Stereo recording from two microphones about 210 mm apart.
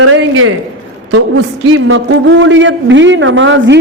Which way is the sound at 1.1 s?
60° right (ahead or behind).